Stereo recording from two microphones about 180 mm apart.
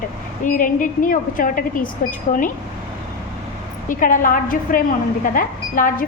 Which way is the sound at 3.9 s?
50° left (ahead or behind).